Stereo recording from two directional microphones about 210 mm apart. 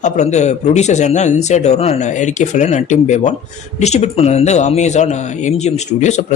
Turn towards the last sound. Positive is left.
turn(degrees=35)  # may be behind; listen again after turning